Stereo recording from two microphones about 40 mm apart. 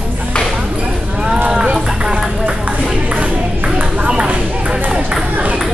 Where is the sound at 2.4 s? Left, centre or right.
Right.